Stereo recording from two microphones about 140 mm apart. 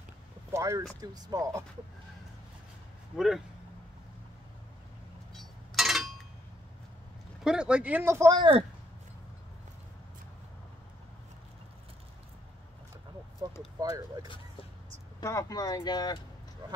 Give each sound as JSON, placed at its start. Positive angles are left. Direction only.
{"t": 0.5, "sound": "a sound", "side_deg": -20}
{"t": 1.0, "sound": "speech", "side_deg": -30}
{"t": 3.2, "sound": "speech", "side_deg": 0}
{"t": 5.8, "sound": "a sound", "side_deg": 0}
{"t": 7.4, "sound": "speech", "side_deg": -5}
{"t": 8.4, "sound": "speech", "side_deg": -40}
{"t": 13.4, "sound": "speech", "side_deg": -25}
{"t": 15.1, "sound": "speech", "side_deg": 25}
{"t": 16.6, "sound": "speech", "side_deg": -30}